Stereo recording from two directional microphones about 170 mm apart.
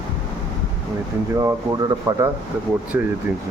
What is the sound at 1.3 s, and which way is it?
Speech, 20° right (ahead or behind).